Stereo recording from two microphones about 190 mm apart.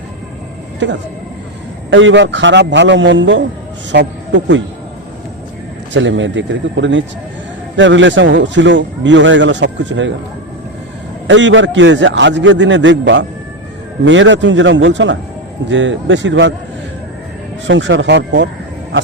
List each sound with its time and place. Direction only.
1.9 s speech: 80° right
5.9 s speech: 75° right (ahead or behind)
11.3 s speech: 75° right (ahead or behind)
17.7 s speech: 75° right (ahead or behind)